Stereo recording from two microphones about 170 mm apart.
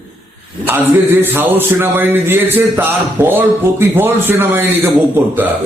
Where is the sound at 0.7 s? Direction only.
10° right (ahead or behind).